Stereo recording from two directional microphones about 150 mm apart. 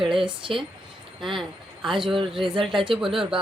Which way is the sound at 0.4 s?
35° right (ahead or behind).